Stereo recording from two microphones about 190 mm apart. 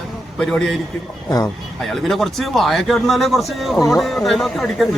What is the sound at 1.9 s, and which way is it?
A man's voice, centre (ahead or behind).